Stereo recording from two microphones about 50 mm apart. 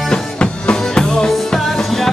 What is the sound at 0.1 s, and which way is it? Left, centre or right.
Music, centre.